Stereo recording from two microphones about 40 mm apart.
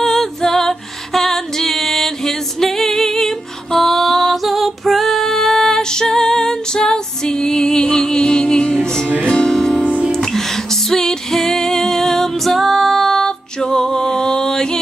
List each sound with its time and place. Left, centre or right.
0.0 s music: centre; by 9.5 s left
9.5 s music: centre
12.5 s female singing: centre
13.7 s music: centre